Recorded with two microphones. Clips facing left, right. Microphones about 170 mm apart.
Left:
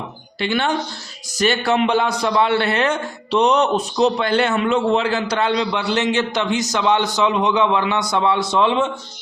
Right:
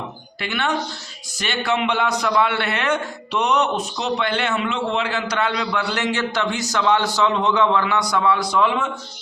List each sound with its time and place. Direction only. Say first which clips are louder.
0.3 s a man's voice: left 4 dB; 30° left (ahead or behind)